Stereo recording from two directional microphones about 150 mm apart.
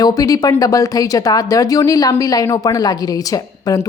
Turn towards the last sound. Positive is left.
turn(degrees=25)  # may be behind; listen again after turning